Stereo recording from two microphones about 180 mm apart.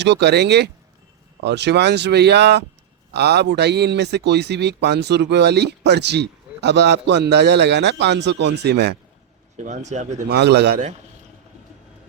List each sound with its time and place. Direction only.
0.0 s speech: 70° right (ahead or behind)
9.6 s speech: 40° right (ahead or behind)
10.2 s speech: 65° right (ahead or behind)